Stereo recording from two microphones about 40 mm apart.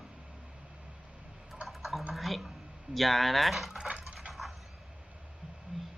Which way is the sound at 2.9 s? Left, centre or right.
Centre.